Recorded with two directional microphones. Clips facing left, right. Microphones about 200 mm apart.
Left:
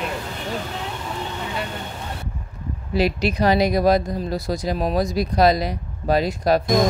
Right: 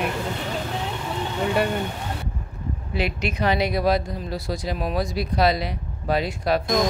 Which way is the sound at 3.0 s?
35° left (ahead or behind).